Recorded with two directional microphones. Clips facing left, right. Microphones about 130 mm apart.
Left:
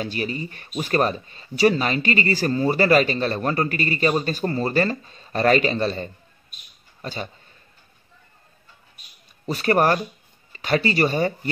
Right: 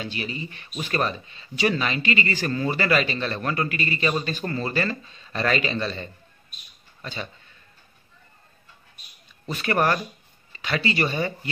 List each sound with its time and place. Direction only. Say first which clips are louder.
0.0 s speech: left 5 dB; 45° left (ahead or behind)
9.5 s speech: left 4 dB; 40° left (ahead or behind)